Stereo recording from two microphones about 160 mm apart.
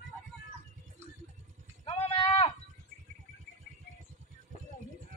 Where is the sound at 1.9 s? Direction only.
35° left (ahead or behind).